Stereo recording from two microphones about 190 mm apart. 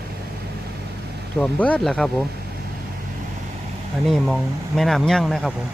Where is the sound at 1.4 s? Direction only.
5° left (ahead or behind).